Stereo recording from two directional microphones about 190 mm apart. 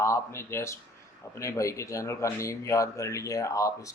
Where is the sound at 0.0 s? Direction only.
15° left (ahead or behind).